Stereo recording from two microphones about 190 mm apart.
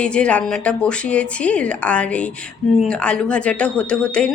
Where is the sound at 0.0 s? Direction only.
5° left (ahead or behind).